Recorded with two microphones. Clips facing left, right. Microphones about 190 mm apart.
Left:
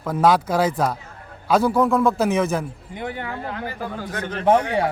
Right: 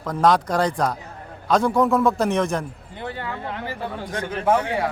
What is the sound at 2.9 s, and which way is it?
Speech, 15° left (ahead or behind).